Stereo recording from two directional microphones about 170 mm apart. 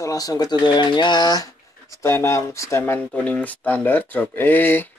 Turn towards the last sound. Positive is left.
turn(degrees=10)  # may be behind; listen again after turning